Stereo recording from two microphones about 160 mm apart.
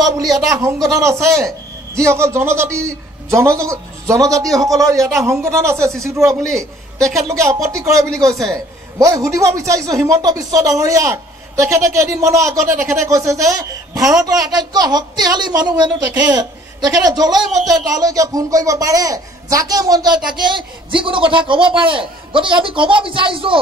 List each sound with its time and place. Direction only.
0.5 s a woman's voice: 20° right (ahead or behind)
17.0 s a woman's voice: 25° right (ahead or behind)